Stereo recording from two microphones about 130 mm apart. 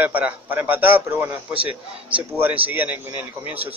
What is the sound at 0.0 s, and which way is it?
A man's voice, 15° right (ahead or behind).